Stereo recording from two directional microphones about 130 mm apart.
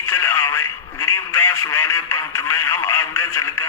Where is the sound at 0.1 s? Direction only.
20° left (ahead or behind).